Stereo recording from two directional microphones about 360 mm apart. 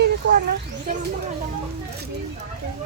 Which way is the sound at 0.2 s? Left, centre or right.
Right.